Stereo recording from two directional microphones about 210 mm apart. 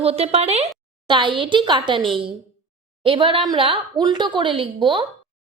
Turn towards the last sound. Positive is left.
turn(degrees=-25)  # may be behind; listen again after turning